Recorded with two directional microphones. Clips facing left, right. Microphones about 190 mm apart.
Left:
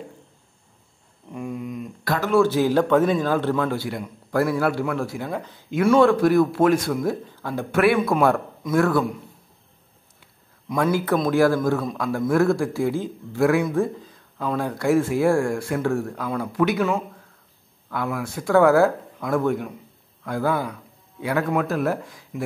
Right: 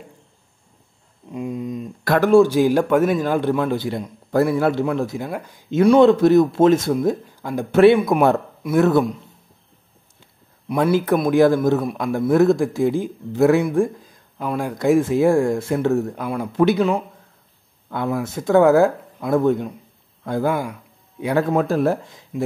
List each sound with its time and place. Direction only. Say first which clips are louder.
1.3 s a sound: right 4 dB; 20° right (ahead or behind)
2.0 s speech: right 7 dB; 50° right (ahead or behind)
2.3 s a man's voice: right 3 dB; 15° right (ahead or behind)
7.7 s a man's voice: right 6 dB; 25° right (ahead or behind)
10.8 s a man's voice: right 3 dB; 20° right (ahead or behind)
13.7 s a man's voice: right 3 dB; 15° right (ahead or behind)